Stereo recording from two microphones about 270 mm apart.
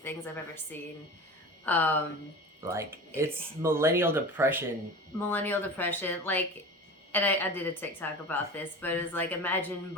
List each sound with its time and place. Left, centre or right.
0.0 s a woman's voice: centre
2.6 s speech: centre
5.3 s a woman's voice: centre